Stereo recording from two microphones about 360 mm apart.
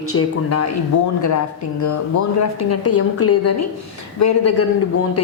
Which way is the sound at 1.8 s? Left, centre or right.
Left.